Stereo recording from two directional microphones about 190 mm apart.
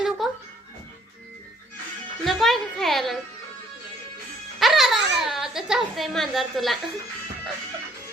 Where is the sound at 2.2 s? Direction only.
Centre (ahead or behind).